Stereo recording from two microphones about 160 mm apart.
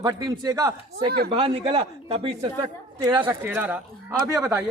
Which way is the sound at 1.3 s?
35° right (ahead or behind).